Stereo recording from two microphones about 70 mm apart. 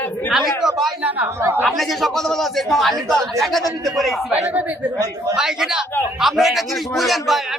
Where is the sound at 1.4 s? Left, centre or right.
Right.